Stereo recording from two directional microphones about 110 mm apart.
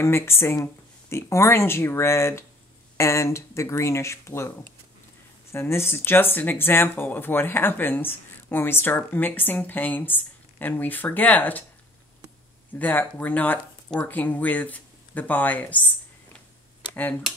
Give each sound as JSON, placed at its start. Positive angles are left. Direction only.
{"t": 0.0, "sound": "speech", "side_deg": 20}
{"t": 12.7, "sound": "speech", "side_deg": 15}